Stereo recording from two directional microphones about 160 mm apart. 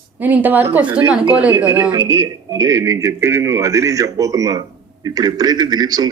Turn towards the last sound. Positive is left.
turn(degrees=-25)  # may be behind; listen again after turning